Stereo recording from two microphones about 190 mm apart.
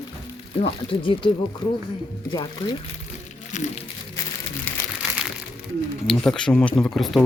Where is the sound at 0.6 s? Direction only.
25° left (ahead or behind).